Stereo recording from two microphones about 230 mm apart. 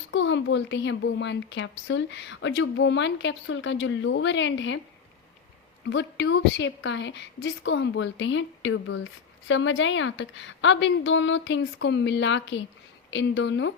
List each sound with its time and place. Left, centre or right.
0.1 s speech: left
5.8 s speech: left